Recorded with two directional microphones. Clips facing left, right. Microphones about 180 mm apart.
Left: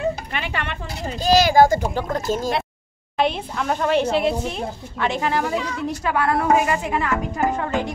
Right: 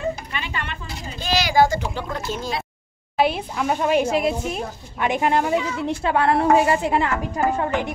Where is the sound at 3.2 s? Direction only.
5° right (ahead or behind); by 7.8 s 25° right (ahead or behind).